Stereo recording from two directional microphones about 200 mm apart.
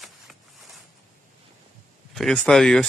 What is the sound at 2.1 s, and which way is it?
Speech, centre (ahead or behind).